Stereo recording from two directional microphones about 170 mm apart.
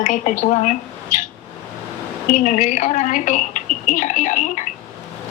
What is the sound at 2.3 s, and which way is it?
A woman's voice, 45° left (ahead or behind).